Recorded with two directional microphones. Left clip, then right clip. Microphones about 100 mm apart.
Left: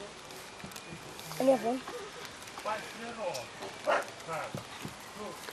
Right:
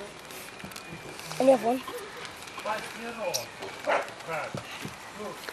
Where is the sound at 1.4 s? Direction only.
20° right (ahead or behind).